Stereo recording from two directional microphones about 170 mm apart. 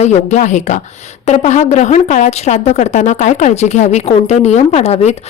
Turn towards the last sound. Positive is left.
turn(degrees=40)  # may be behind; listen again after turning